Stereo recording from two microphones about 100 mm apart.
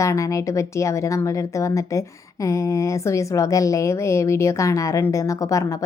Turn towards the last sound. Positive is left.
turn(degrees=35)  # may be behind; listen again after turning